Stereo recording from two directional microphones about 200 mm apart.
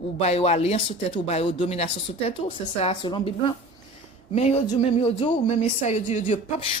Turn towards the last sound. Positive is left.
turn(degrees=35)  # may be behind; listen again after turning